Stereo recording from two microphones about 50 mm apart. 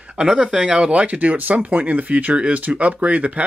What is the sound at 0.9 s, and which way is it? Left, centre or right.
Speech, right.